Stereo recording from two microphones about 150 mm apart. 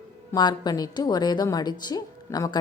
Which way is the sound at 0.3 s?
25° left (ahead or behind).